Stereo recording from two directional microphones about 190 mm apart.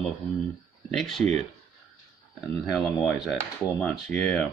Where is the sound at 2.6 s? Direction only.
Centre (ahead or behind).